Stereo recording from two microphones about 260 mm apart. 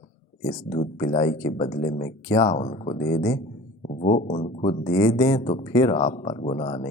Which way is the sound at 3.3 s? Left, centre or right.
Left.